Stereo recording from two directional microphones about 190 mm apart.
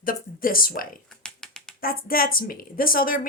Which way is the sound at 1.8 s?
50° left (ahead or behind).